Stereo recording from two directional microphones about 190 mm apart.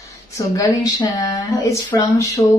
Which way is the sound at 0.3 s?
20° left (ahead or behind).